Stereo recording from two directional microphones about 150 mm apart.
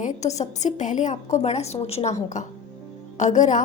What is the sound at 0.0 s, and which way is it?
A woman's voice, 50° left (ahead or behind).